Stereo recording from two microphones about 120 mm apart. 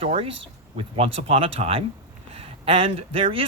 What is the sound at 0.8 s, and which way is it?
A man's voice, 50° right (ahead or behind).